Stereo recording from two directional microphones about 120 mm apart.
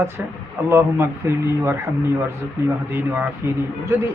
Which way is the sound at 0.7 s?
25° right (ahead or behind).